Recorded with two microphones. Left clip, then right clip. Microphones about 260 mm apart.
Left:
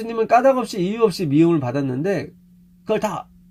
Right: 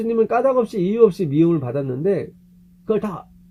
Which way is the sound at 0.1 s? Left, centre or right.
Left.